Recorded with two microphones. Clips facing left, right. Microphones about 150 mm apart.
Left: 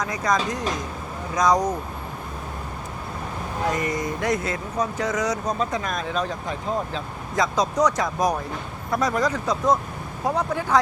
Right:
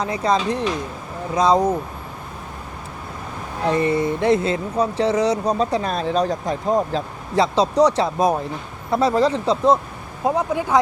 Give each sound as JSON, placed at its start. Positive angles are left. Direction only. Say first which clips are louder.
{"t": 0.0, "sound": "speech", "louder": "right 4 dB", "side_deg": -30}
{"t": 3.7, "sound": "speech", "louder": "right 8 dB", "side_deg": -30}
{"t": 10.2, "sound": "speech", "louder": "right 4 dB", "side_deg": -15}